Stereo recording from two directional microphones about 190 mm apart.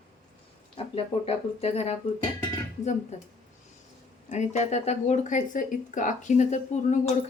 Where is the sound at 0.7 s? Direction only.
30° left (ahead or behind).